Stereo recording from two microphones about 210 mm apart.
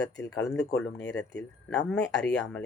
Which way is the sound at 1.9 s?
5° left (ahead or behind).